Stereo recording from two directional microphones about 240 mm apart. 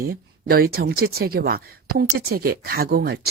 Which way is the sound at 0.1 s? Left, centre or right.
Right.